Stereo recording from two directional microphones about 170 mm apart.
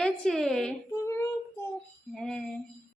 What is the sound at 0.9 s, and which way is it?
Child singing, 15° left (ahead or behind).